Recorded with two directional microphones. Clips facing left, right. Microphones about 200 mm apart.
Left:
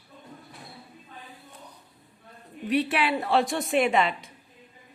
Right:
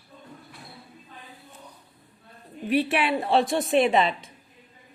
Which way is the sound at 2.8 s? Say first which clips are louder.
Right 2 dB; 25° right (ahead or behind).